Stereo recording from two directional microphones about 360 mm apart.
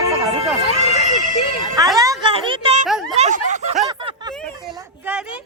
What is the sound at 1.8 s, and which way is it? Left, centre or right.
A woman's voice, centre.